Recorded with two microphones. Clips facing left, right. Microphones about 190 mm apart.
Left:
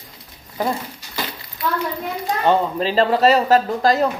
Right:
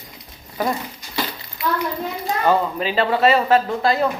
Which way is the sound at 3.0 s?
40° left (ahead or behind).